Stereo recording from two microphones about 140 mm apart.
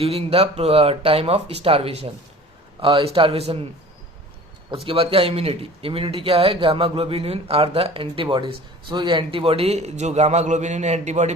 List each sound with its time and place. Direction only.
0.0 s a man's voice: 45° right (ahead or behind)
4.7 s speech: 40° right (ahead or behind)